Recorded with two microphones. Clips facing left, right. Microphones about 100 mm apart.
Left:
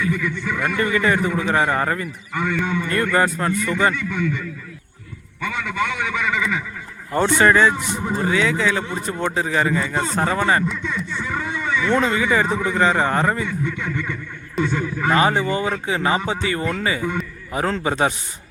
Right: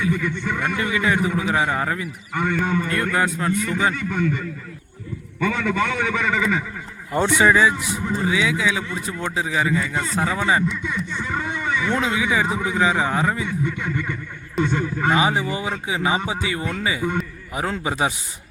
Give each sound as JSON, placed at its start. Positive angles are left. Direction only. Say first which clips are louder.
{"t": 0.1, "sound": "a man's voice", "louder": "even", "side_deg": -35}
{"t": 0.8, "sound": "a man's voice", "louder": "left 3 dB", "side_deg": -5}
{"t": 2.4, "sound": "speech", "louder": "right 1 dB", "side_deg": -45}
{"t": 3.2, "sound": "a man's voice", "louder": "left 3 dB", "side_deg": 0}
{"t": 3.9, "sound": "a man's voice", "louder": "right 1 dB", "side_deg": -40}
{"t": 7.1, "sound": "a man's voice", "louder": "left 1 dB", "side_deg": -10}
{"t": 9.8, "sound": "a man's voice", "louder": "left 2 dB", "side_deg": 30}
{"t": 10.2, "sound": "speech", "louder": "left 1 dB", "side_deg": -5}
{"t": 11.9, "sound": "a man's voice", "louder": "left 4 dB", "side_deg": -5}
{"t": 13.7, "sound": "a man's voice", "louder": "even", "side_deg": -15}
{"t": 15.1, "sound": "a man's voice", "louder": "left 4 dB", "side_deg": -5}